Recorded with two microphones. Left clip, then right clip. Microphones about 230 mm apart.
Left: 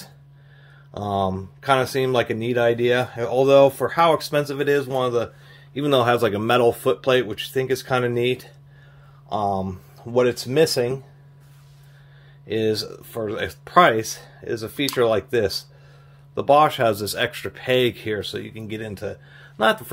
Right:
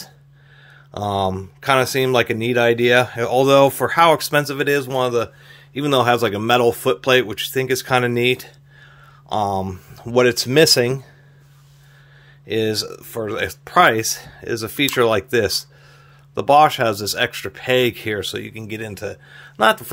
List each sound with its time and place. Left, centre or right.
0.9 s speech: right
12.4 s speech: right